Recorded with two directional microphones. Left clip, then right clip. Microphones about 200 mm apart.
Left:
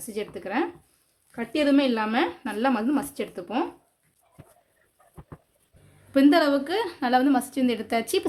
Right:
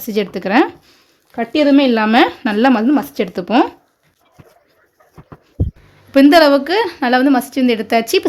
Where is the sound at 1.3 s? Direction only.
25° right (ahead or behind); by 3.7 s 45° right (ahead or behind).